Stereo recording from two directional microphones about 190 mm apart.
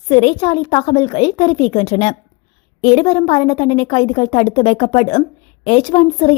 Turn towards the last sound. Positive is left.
turn(degrees=30)  # may be behind; listen again after turning